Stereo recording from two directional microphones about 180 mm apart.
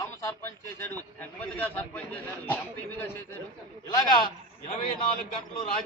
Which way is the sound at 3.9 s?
25° left (ahead or behind).